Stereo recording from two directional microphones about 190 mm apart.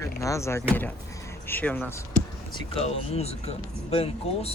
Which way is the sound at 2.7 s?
30° left (ahead or behind).